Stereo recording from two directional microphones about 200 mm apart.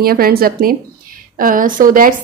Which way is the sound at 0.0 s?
50° right (ahead or behind).